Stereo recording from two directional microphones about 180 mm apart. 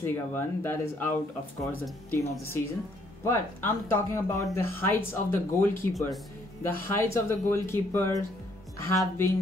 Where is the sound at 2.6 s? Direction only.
10° left (ahead or behind).